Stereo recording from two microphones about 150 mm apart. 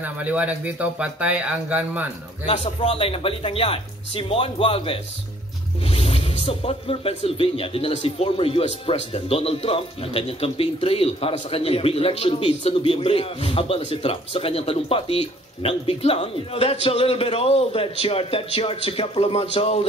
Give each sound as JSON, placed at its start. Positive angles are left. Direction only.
{"t": 0.0, "sound": "speech", "side_deg": -10}
{"t": 2.4, "sound": "speech", "side_deg": 50}